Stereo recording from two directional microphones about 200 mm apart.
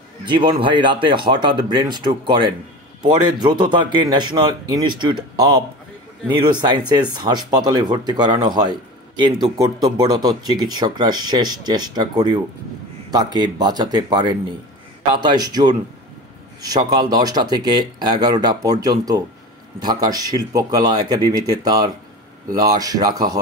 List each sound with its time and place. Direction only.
0.2 s speech: 25° right (ahead or behind)